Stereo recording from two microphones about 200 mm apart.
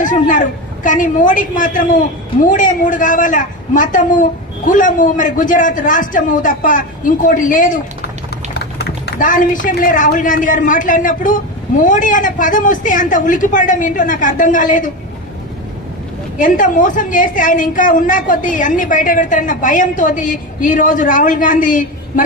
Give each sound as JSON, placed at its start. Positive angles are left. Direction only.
{"t": 0.0, "sound": "speech", "side_deg": 40}
{"t": 8.5, "sound": "speech", "side_deg": 55}
{"t": 16.3, "sound": "speech", "side_deg": 40}